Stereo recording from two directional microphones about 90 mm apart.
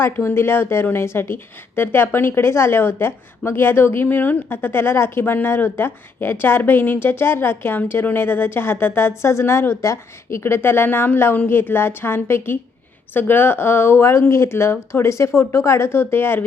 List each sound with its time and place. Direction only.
0.0 s speech: 25° left (ahead or behind)